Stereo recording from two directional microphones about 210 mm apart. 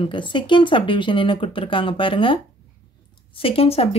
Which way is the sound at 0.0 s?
25° left (ahead or behind).